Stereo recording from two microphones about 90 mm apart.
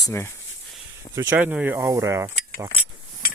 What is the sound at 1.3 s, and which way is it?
Speech, 15° right (ahead or behind).